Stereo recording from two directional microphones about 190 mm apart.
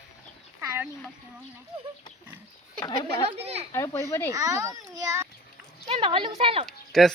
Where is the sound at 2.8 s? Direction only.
20° left (ahead or behind).